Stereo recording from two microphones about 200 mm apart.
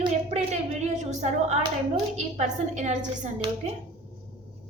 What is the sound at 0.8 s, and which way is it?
A woman's voice, 35° right (ahead or behind).